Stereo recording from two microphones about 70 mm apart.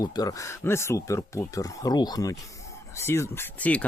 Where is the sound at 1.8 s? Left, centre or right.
Left.